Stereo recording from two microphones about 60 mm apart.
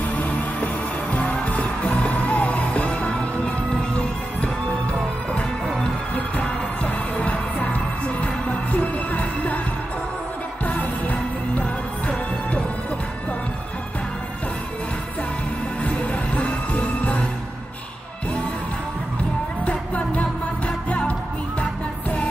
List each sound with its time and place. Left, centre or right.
0.0 s music: left
5.7 s music: centre
10.6 s music: left
15.8 s music: left
19.6 s music: left